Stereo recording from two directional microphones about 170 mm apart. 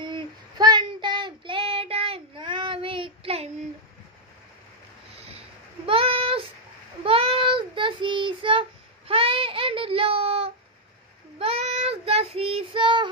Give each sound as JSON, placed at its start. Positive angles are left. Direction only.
{"t": 0.0, "sound": "child singing", "side_deg": -25}
{"t": 5.1, "sound": "a sound", "side_deg": -35}
{"t": 7.0, "sound": "child singing", "side_deg": -35}